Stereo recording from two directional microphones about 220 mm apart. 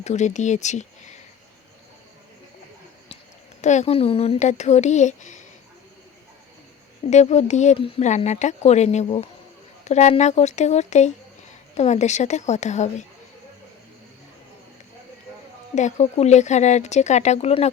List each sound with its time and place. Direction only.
0.0 s speech: 30° left (ahead or behind)
3.6 s speech: 30° left (ahead or behind)
7.0 s speech: 30° left (ahead or behind)
15.7 s speech: 30° left (ahead or behind)